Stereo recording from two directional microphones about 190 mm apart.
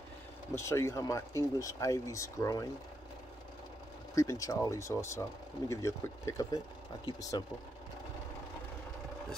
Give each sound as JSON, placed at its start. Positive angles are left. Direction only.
{"t": 0.6, "sound": "speech", "side_deg": 15}
{"t": 4.1, "sound": "speech", "side_deg": 15}